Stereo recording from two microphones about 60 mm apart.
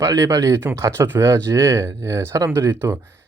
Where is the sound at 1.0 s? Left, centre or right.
Right.